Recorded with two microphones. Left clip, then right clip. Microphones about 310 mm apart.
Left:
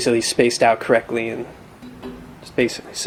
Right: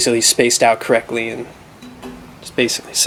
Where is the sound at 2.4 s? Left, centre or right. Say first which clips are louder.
Right 3 dB; centre.